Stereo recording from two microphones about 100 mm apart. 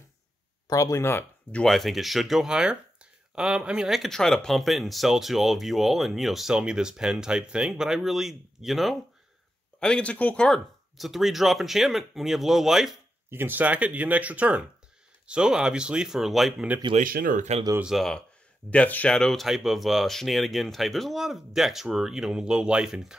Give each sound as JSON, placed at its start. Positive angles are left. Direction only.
{"t": 0.7, "sound": "speech", "side_deg": 35}
{"t": 1.5, "sound": "speech", "side_deg": 5}
{"t": 13.3, "sound": "speech", "side_deg": -20}
{"t": 16.9, "sound": "speech", "side_deg": -90}
{"t": 17.9, "sound": "speech", "side_deg": 5}
{"t": 18.7, "sound": "speech", "side_deg": 15}
{"t": 19.1, "sound": "speech", "side_deg": 5}